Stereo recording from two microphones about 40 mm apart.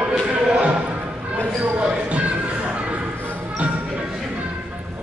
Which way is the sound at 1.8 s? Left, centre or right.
Right.